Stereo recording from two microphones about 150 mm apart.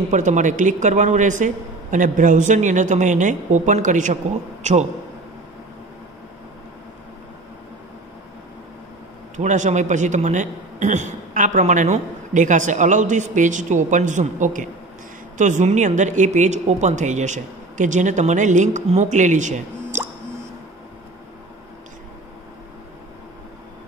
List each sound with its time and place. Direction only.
0.1 s a man's voice: 55° right (ahead or behind)
9.4 s a man's voice: 55° right (ahead or behind)